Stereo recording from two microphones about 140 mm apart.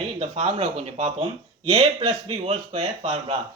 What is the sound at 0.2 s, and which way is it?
Speech, 50° right (ahead or behind).